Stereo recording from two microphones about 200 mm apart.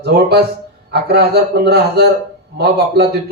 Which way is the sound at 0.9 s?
55° right (ahead or behind).